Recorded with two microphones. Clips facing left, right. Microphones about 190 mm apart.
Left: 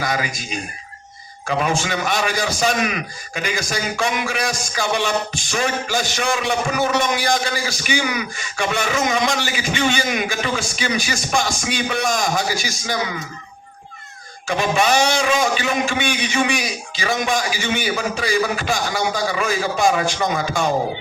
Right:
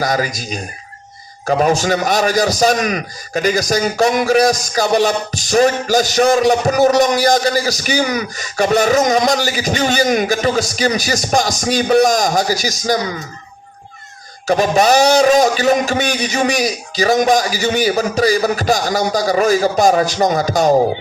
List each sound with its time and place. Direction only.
0.0 s a man's voice: 40° right (ahead or behind)
14.4 s a man's voice: 40° right (ahead or behind)